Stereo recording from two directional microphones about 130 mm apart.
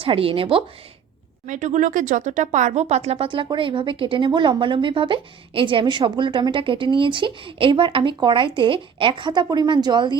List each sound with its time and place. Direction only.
0.0 s a woman's voice: 45° right (ahead or behind)
1.5 s speech: 70° right (ahead or behind); by 10.2 s 35° right (ahead or behind)